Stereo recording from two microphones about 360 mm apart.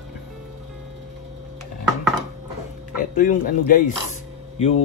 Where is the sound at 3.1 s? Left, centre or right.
Left.